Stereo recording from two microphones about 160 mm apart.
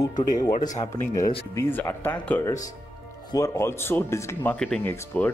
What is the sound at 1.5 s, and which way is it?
Speech, 15° left (ahead or behind).